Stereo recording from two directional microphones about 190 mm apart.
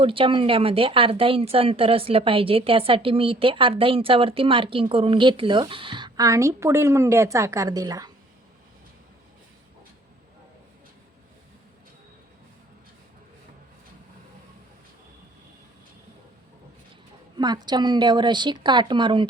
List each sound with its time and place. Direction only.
0.0 s speech: 30° right (ahead or behind)
17.3 s speech: 20° right (ahead or behind)